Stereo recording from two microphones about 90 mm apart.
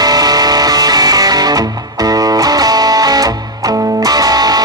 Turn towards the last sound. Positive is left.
turn(degrees=-45)  # may be behind; listen again after turning